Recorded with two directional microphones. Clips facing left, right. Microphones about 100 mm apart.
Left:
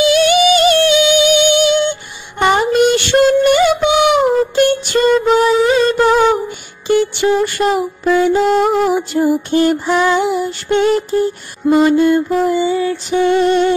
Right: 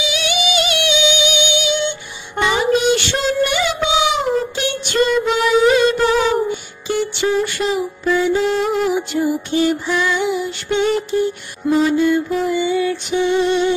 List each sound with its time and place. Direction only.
0.0 s music: 45° left (ahead or behind)
6.9 s mantra: 55° left (ahead or behind); by 12.9 s 30° left (ahead or behind)
13.2 s music: 55° left (ahead or behind)